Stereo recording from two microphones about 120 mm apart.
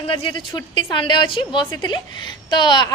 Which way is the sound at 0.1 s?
45° left (ahead or behind).